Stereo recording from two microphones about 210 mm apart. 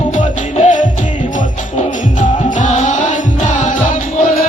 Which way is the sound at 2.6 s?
35° left (ahead or behind).